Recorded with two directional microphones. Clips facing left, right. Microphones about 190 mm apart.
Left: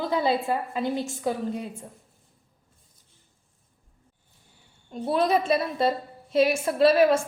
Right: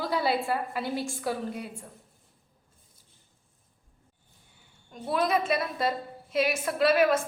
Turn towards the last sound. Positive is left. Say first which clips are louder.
# left 4 dB
turn(degrees=30)  # may be behind; listen again after turning